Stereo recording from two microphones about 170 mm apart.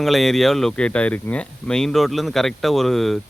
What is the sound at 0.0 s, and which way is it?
Speech, centre (ahead or behind).